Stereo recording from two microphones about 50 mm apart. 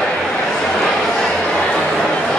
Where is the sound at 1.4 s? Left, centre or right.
Centre.